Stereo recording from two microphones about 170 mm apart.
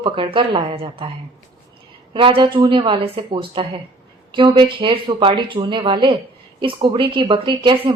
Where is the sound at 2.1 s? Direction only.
30° right (ahead or behind).